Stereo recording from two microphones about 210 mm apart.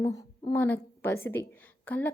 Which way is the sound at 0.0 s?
20° left (ahead or behind).